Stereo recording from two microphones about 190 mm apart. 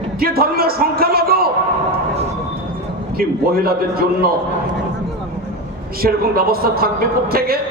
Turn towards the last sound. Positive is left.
turn(degrees=-55)  # may be behind; listen again after turning